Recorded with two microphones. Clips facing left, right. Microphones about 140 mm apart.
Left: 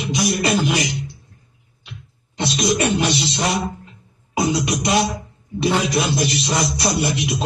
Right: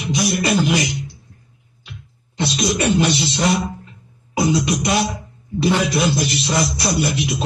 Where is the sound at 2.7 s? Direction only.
25° left (ahead or behind).